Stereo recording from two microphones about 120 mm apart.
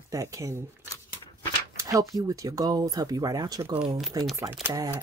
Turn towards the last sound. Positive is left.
turn(degrees=-30)  # may be behind; listen again after turning